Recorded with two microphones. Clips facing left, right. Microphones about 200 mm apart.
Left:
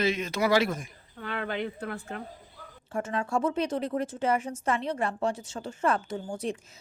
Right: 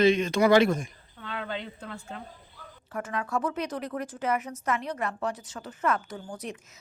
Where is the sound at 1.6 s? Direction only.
65° left (ahead or behind).